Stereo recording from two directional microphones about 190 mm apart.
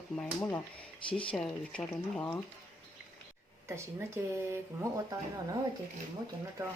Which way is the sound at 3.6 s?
15° right (ahead or behind).